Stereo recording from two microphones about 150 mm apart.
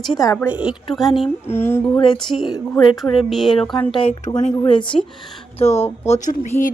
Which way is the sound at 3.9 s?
40° left (ahead or behind).